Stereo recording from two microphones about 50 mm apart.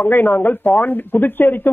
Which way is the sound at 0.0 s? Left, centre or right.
Left.